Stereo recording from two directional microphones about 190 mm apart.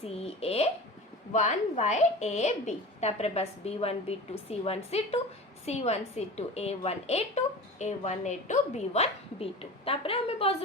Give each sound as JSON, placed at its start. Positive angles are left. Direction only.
{"t": 0.0, "sound": "a woman's voice", "side_deg": 30}